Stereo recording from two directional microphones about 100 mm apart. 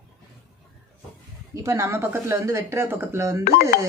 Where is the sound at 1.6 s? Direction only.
30° right (ahead or behind).